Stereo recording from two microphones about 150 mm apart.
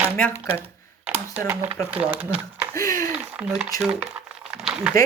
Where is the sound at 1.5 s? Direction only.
10° right (ahead or behind).